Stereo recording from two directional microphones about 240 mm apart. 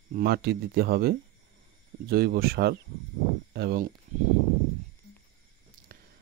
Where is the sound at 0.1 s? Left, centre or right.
Right.